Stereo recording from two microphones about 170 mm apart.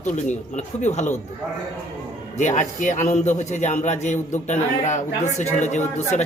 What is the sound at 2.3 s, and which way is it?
A man's voice, 45° left (ahead or behind).